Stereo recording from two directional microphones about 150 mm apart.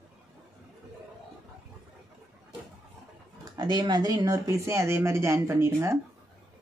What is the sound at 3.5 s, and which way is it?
Speech, 30° right (ahead or behind).